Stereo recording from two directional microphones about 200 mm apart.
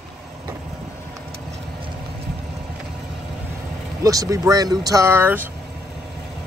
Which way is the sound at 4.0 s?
15° right (ahead or behind).